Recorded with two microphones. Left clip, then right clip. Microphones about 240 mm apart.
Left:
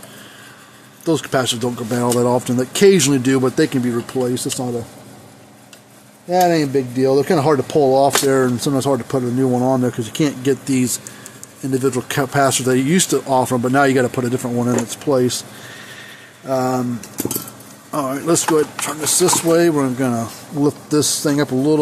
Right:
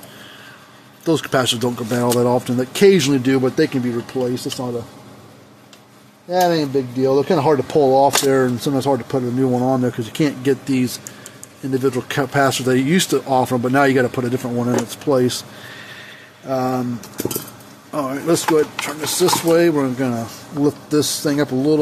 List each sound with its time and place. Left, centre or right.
1.0 s speech: centre
6.4 s speech: left; by 15.4 s centre
16.4 s speech: centre